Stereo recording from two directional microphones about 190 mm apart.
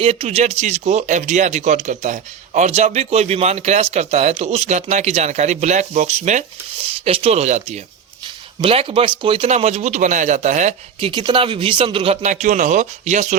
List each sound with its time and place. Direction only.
0.0 s speech: 30° right (ahead or behind)
11.1 s speech: 25° right (ahead or behind)